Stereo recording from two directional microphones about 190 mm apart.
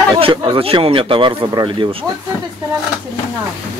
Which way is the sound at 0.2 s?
25° right (ahead or behind).